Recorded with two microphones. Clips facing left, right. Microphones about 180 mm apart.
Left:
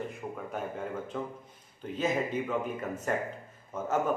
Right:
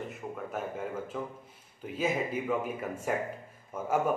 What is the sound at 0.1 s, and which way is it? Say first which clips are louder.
A man's voice: even; centre (ahead or behind).